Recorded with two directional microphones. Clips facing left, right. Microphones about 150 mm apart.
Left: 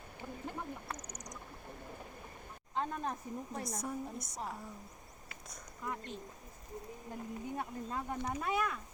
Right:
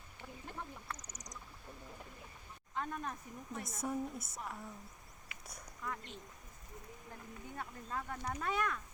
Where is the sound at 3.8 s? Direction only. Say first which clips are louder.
Right 2 dB; centre (ahead or behind).